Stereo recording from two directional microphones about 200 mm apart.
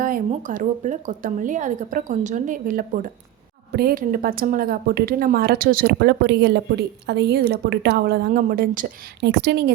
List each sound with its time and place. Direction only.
0.0 s speech: 40° right (ahead or behind)
9.2 s speech: 55° right (ahead or behind)